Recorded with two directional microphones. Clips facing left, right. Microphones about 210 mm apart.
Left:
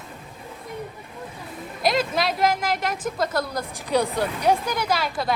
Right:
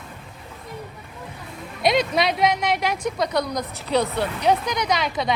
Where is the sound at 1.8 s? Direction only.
Centre (ahead or behind).